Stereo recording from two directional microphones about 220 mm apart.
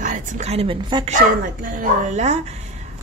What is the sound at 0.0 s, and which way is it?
Speech, 35° right (ahead or behind).